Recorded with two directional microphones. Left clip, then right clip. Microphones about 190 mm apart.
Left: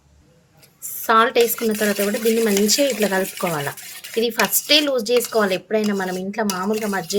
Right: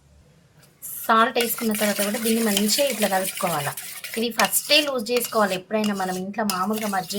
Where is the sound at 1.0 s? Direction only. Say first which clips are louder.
Left 4 dB; 40° left (ahead or behind).